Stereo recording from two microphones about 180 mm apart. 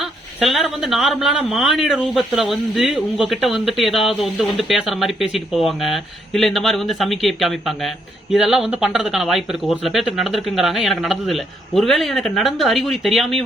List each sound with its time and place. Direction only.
0.0 s speech: centre (ahead or behind)